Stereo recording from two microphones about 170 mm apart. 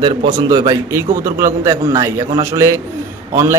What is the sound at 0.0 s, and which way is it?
A man's voice, 25° right (ahead or behind).